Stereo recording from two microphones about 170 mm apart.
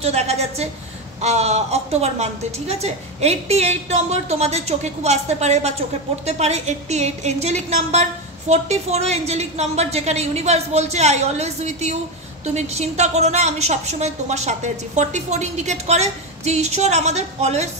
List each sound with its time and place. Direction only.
0.0 s a woman's voice: 40° right (ahead or behind)